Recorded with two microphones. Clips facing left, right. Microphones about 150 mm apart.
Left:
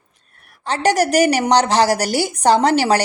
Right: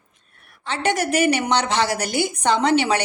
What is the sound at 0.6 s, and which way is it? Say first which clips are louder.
A woman's voice: left 6 dB; 40° left (ahead or behind).